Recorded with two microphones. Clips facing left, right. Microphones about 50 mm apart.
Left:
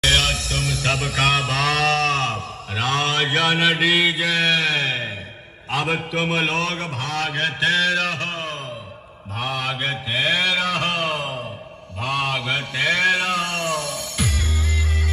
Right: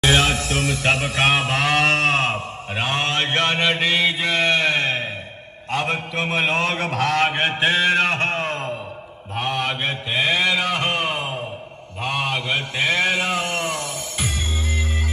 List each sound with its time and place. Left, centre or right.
0.0 s music: centre
0.4 s a sound: right
2.3 s mantra: centre
4.6 s music: centre
5.8 s mantra: centre
6.5 s a sound: right
6.8 s mantra: right
7.2 s a man's voice: right
9.4 s mantra: centre
12.7 s music: centre